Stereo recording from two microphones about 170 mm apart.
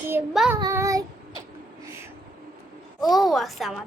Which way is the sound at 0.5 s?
15° right (ahead or behind).